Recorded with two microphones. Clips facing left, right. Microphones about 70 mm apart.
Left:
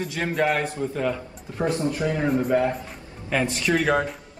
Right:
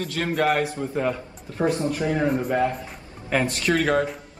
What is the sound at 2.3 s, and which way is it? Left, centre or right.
Speech, centre.